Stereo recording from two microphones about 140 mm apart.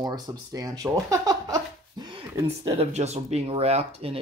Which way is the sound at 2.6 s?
45° right (ahead or behind).